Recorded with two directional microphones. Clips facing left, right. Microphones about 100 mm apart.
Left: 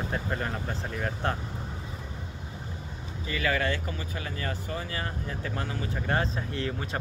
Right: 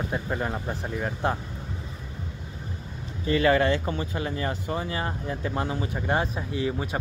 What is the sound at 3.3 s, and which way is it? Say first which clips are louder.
Speech: right 7 dB; 30° right (ahead or behind).